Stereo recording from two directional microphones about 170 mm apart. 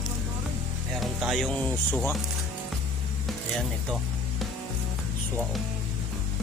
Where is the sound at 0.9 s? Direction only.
Centre (ahead or behind).